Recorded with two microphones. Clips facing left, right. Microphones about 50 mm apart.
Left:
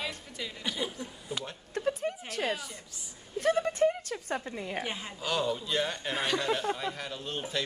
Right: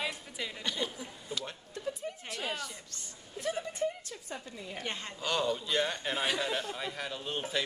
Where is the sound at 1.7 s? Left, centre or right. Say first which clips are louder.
Left 8 dB; left.